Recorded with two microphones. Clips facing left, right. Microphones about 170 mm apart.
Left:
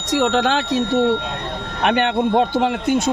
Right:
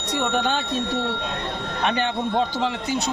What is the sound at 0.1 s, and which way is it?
Speech, 90° left.